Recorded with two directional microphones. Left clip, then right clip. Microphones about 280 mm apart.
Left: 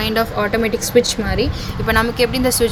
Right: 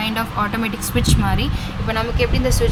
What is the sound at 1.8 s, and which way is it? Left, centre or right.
Speech, centre.